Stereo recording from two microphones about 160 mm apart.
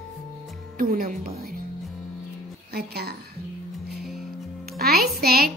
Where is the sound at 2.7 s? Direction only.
80° right.